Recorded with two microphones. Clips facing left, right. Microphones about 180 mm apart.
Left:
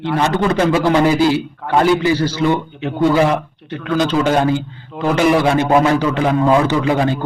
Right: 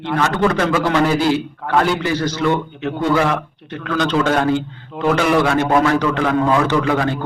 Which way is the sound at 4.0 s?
10° left (ahead or behind).